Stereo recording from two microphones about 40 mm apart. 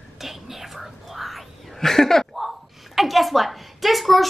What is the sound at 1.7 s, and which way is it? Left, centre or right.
Speech, centre.